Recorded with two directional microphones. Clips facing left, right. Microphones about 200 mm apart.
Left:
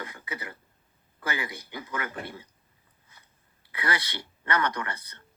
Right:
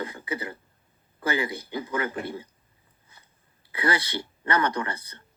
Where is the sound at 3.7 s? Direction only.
25° right (ahead or behind).